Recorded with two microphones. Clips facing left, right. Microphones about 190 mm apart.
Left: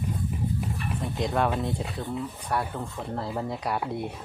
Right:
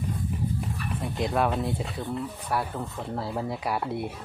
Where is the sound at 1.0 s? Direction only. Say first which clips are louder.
Even; centre (ahead or behind).